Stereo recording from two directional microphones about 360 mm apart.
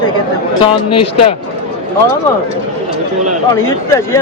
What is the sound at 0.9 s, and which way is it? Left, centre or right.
Speech, left.